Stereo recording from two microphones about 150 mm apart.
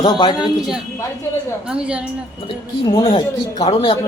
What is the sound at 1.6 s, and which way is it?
Speech, 5° right (ahead or behind).